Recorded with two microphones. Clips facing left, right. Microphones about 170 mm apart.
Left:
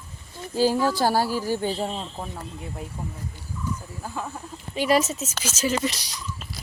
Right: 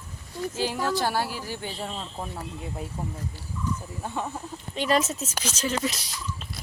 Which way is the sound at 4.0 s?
Centre (ahead or behind).